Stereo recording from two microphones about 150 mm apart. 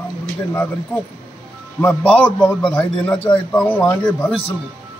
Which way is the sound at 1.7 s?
5° left (ahead or behind).